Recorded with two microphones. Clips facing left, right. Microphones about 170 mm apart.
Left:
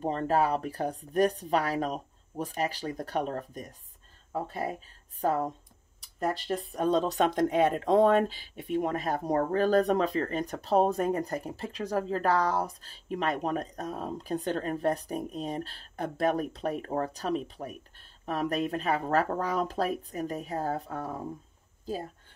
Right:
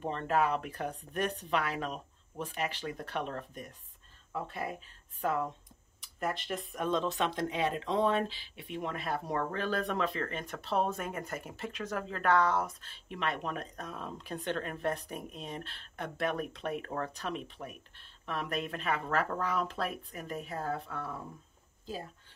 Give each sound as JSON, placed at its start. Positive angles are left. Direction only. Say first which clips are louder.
{"t": 0.0, "sound": "speech", "louder": "left 4 dB", "side_deg": 35}